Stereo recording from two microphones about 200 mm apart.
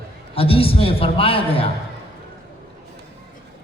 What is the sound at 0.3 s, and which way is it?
A man's voice, 30° left (ahead or behind).